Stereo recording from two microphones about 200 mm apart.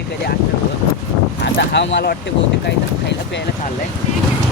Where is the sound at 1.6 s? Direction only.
60° left (ahead or behind).